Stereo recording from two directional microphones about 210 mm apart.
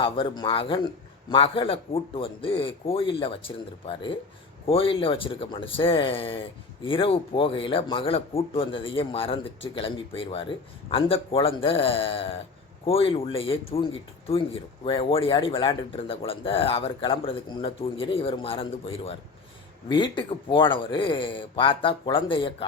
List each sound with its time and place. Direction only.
0.0 s a man's voice: 25° left (ahead or behind)